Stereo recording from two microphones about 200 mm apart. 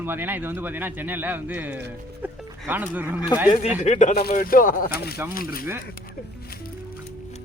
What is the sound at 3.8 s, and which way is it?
Speech, 35° left (ahead or behind).